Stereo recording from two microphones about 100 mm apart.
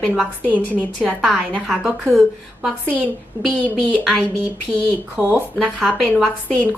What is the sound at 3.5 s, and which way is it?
Speech, 15° left (ahead or behind).